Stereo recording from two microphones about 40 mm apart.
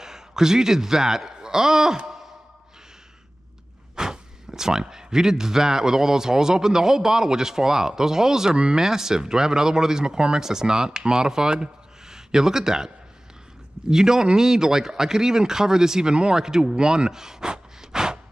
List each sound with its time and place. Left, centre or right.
0.0 s a man's voice: centre
3.9 s a sound: centre
4.5 s a man's voice: centre